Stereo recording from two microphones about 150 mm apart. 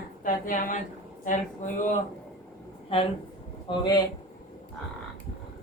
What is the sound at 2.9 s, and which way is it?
Speech, 40° left (ahead or behind).